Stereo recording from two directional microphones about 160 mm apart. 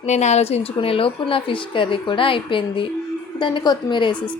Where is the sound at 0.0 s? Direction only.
45° left (ahead or behind).